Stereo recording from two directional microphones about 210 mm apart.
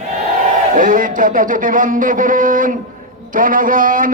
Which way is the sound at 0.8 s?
40° right (ahead or behind).